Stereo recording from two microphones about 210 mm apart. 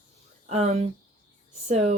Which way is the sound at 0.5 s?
30° right (ahead or behind).